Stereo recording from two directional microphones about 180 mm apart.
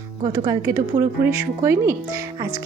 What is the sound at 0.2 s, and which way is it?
Speech, 20° right (ahead or behind).